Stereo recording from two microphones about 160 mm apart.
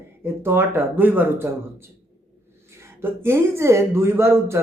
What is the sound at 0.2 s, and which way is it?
Speech, 15° right (ahead or behind).